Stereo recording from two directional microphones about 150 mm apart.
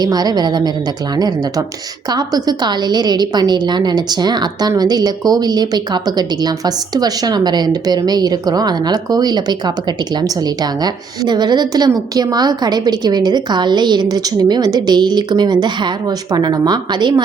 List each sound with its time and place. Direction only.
0.0 s a woman's voice: 25° right (ahead or behind)